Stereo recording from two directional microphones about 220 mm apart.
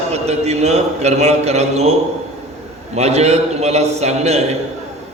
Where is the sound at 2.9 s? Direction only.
30° right (ahead or behind).